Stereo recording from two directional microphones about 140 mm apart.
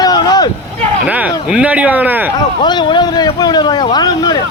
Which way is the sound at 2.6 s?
35° left (ahead or behind).